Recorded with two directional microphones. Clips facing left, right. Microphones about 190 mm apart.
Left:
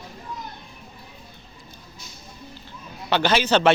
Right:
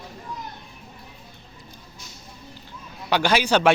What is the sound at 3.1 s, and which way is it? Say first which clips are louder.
Speech: even; 10° right (ahead or behind).